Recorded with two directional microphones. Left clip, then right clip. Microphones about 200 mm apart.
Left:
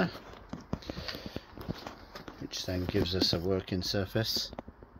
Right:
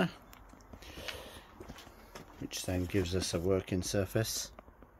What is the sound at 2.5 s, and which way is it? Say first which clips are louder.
Speech: left 2 dB; 20° right (ahead or behind).